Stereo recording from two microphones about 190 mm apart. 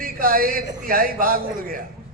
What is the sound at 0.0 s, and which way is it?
A man's voice, 50° right (ahead or behind).